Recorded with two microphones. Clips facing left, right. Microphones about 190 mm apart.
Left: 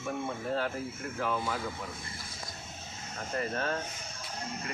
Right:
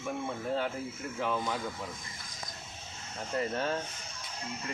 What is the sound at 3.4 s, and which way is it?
Speech, 20° right (ahead or behind).